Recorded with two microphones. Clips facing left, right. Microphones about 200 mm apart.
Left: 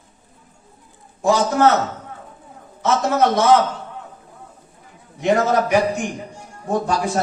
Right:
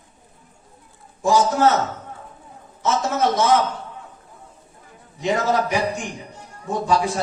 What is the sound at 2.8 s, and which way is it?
Speech, 65° left (ahead or behind).